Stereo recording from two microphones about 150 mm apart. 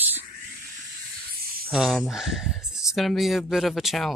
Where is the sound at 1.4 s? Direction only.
80° right.